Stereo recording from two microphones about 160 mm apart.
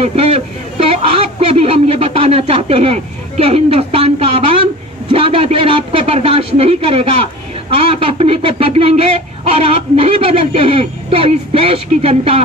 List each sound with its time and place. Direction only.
0.0 s speech: 40° right (ahead or behind)